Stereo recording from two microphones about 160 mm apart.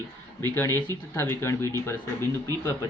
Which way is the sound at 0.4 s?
15° left (ahead or behind).